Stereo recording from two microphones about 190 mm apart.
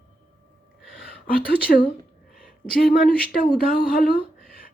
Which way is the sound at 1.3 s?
50° left (ahead or behind).